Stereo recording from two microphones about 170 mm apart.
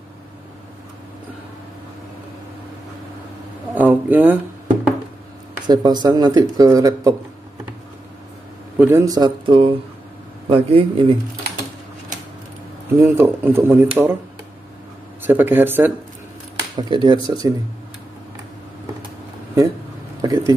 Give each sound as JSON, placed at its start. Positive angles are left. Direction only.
{"t": 3.7, "sound": "a sound", "side_deg": -10}
{"t": 5.7, "sound": "speech", "side_deg": -25}
{"t": 8.7, "sound": "a man's voice", "side_deg": -10}
{"t": 12.9, "sound": "speech", "side_deg": -15}
{"t": 15.2, "sound": "speech", "side_deg": -10}
{"t": 16.7, "sound": "speech", "side_deg": -25}
{"t": 20.2, "sound": "a sound", "side_deg": -20}